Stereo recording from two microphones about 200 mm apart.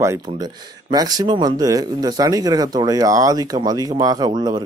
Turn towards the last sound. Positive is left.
turn(degrees=-20)  # may be behind; listen again after turning